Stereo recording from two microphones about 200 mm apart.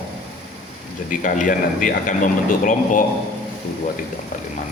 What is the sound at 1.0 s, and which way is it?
A man's voice, 40° left (ahead or behind).